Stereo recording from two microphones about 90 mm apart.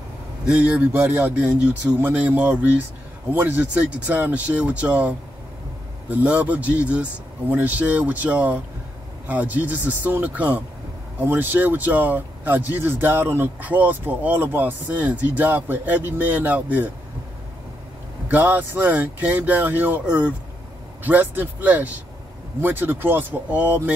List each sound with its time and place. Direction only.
0.5 s speech: 15° right (ahead or behind)
18.3 s speech: 20° right (ahead or behind)